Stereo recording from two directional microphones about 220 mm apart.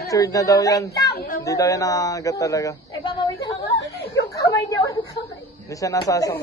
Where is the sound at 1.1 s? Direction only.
40° left (ahead or behind).